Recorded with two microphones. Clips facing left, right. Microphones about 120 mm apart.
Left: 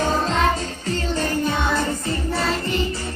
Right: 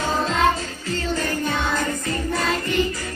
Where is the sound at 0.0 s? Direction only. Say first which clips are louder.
Even; 35° left (ahead or behind).